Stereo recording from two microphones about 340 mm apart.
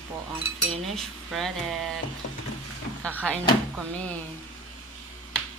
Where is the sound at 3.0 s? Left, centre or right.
Centre.